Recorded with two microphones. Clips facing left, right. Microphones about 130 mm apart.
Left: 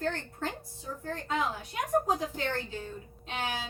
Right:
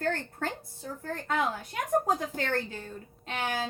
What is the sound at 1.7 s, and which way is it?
A woman's voice, 55° right (ahead or behind).